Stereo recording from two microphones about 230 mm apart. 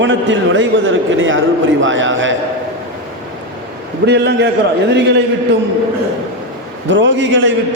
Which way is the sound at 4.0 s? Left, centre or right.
Right.